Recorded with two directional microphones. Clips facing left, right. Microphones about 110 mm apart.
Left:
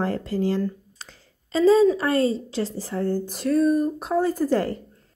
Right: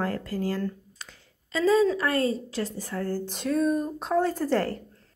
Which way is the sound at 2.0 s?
30° left (ahead or behind).